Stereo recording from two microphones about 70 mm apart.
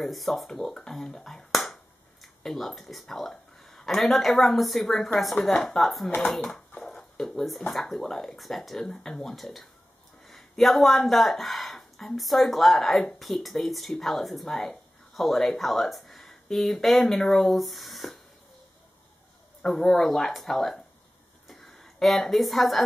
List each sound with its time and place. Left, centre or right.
0.0 s speech: centre
6.0 s speech: centre
6.3 s speech: centre
6.7 s a sound: left
7.0 s speech: centre
19.6 s speech: centre
21.5 s a sound: centre